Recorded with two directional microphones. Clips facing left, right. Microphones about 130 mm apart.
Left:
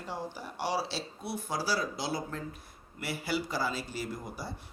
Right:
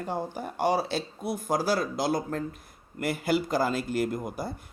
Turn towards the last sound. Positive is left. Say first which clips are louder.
# right 7 dB
turn(degrees=-50)  # may be behind; listen again after turning